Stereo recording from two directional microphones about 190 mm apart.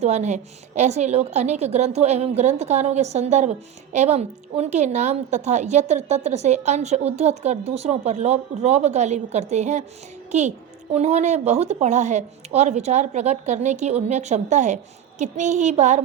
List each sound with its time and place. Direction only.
0.0 s a woman's voice: 35° right (ahead or behind)
10.9 s a woman's voice: 35° right (ahead or behind)